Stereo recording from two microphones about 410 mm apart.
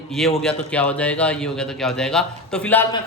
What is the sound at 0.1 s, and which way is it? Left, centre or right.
A man's voice, centre.